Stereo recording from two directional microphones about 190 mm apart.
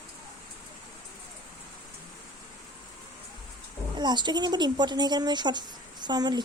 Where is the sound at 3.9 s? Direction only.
25° right (ahead or behind).